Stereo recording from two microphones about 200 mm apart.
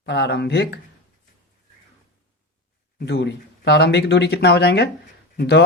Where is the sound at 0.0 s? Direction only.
55° left (ahead or behind).